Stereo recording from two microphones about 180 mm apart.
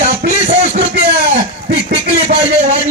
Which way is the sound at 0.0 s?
45° right (ahead or behind).